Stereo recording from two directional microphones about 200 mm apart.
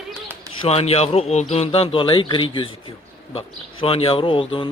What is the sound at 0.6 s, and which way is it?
A man's voice, 30° left (ahead or behind).